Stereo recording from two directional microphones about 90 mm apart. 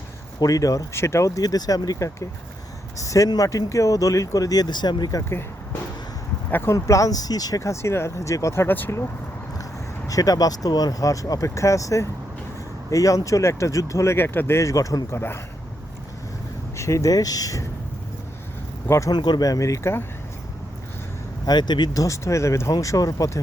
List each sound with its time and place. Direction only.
0.3 s speech: 40° left (ahead or behind)
6.5 s speech: 25° left (ahead or behind)
6.7 s speech: 35° left (ahead or behind)
10.1 s speech: 40° left (ahead or behind)
16.7 s speech: 35° left (ahead or behind)
18.9 s speech: 35° left (ahead or behind)
19.1 s speech: 55° left (ahead or behind)
19.5 s speech: 40° left (ahead or behind)
21.4 s speech: 50° left (ahead or behind)
22.0 s speech: 35° left (ahead or behind)